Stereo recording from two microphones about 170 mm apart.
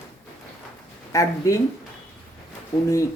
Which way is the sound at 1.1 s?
20° left (ahead or behind).